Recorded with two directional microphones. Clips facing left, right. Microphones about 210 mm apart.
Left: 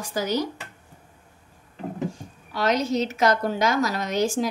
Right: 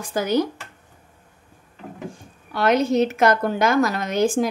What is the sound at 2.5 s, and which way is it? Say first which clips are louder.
A woman's voice: right 5 dB; 55° right (ahead or behind).